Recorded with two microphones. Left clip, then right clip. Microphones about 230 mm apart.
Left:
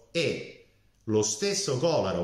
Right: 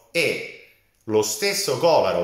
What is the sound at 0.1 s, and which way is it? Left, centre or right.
Speech, centre.